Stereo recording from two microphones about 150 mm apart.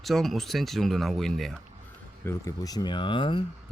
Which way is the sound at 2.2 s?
20° left (ahead or behind).